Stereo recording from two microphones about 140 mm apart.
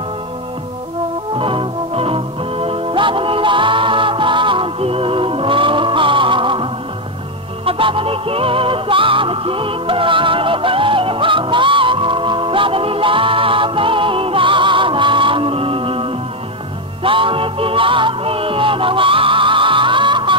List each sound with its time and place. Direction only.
1.3 s music: 40° right (ahead or behind)